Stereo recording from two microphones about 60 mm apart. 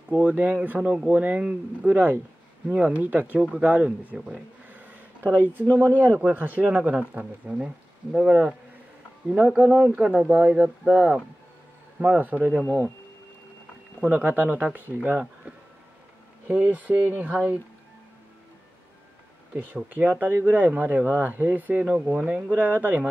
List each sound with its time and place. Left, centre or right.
0.1 s speech: right
1.9 s speech: right; by 8.5 s centre
9.6 s speech: right
14.0 s speech: right
16.7 s speech: right
19.5 s speech: right